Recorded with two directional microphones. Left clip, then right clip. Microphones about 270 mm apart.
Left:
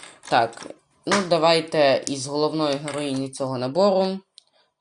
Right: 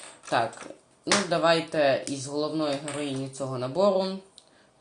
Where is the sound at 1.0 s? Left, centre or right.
Left.